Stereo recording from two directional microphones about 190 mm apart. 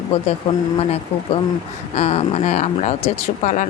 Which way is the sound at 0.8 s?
30° left (ahead or behind).